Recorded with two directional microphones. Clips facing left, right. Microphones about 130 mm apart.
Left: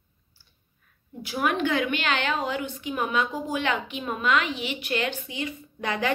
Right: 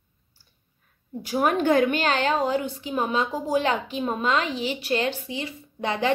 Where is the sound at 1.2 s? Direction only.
40° right (ahead or behind).